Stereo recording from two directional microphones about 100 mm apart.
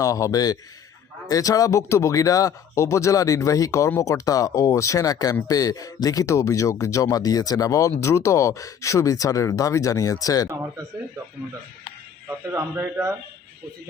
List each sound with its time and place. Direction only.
0.0 s speech: 35° left (ahead or behind)
12.5 s a man's voice: 25° right (ahead or behind)